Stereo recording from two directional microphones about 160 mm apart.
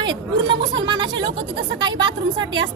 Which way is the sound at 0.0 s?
30° right (ahead or behind).